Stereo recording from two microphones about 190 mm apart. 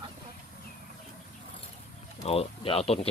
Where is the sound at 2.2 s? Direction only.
30° left (ahead or behind).